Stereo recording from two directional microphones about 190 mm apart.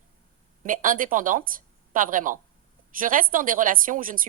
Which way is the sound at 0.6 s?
45° right (ahead or behind).